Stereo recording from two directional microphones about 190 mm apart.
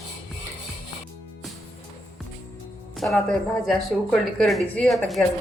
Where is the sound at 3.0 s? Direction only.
Centre (ahead or behind).